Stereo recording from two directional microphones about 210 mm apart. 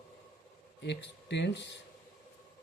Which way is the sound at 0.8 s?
55° left (ahead or behind).